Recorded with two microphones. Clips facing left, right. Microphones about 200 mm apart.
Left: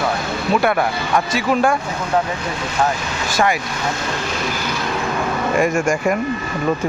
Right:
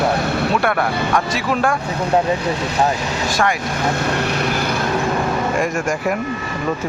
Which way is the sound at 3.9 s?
65° right (ahead or behind).